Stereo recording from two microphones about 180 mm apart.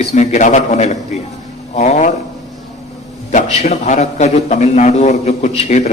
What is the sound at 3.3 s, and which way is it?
A man's voice, 40° left (ahead or behind).